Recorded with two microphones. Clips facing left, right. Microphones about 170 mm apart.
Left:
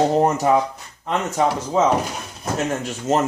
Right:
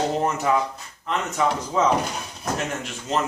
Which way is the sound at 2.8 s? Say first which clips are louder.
Left 7 dB; 40° left (ahead or behind).